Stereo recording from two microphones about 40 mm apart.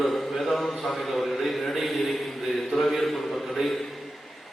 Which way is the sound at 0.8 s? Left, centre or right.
Centre.